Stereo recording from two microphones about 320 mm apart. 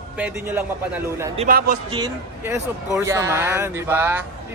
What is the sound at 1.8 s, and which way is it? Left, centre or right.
A man's voice, centre.